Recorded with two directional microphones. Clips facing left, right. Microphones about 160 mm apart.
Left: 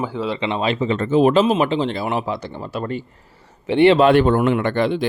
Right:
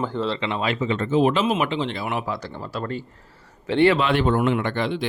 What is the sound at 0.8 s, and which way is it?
Speech, 45° left (ahead or behind).